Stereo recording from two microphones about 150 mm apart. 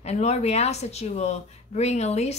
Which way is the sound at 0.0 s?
45° left (ahead or behind).